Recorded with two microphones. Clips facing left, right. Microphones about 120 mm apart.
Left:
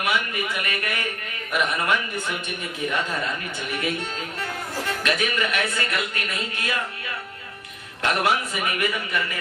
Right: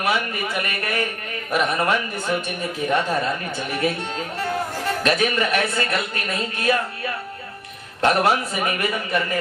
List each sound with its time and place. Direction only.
0.0 s speech: 35° right (ahead or behind)
5.0 s speech: 35° right (ahead or behind)